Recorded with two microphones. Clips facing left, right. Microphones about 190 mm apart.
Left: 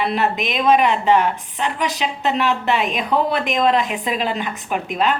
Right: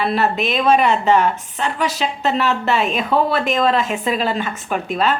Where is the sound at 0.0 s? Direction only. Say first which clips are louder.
Right 2 dB; 15° left (ahead or behind).